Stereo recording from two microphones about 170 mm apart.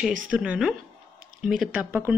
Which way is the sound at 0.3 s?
5° right (ahead or behind).